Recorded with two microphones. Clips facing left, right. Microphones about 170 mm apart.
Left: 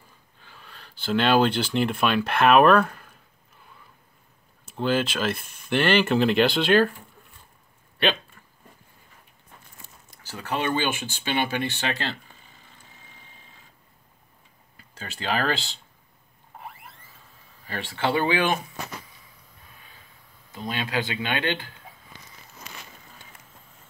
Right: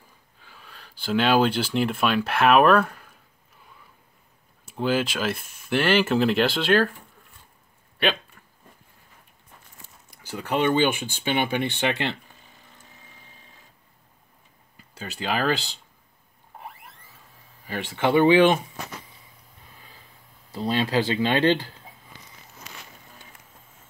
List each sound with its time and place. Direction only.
0.4 s speech: 5° right (ahead or behind)
4.6 s speech: 10° right (ahead or behind)
10.2 s speech: 15° right (ahead or behind)
15.0 s speech: 10° right (ahead or behind)
17.6 s speech: 15° right (ahead or behind)
20.5 s speech: 35° right (ahead or behind)